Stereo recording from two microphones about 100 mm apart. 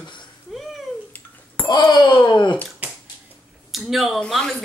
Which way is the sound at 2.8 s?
15° right (ahead or behind).